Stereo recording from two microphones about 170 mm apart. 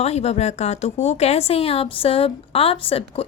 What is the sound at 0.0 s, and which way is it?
A woman's voice, 40° left (ahead or behind).